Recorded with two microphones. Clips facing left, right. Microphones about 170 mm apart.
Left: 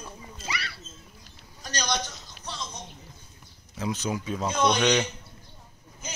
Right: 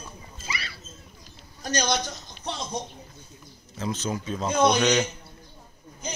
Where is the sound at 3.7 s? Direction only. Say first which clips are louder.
Even; 15° left (ahead or behind).